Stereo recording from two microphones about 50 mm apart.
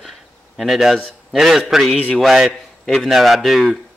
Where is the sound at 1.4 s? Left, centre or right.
Centre.